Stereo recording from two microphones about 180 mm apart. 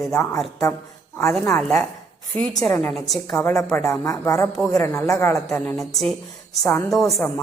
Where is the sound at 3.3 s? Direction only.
15° left (ahead or behind).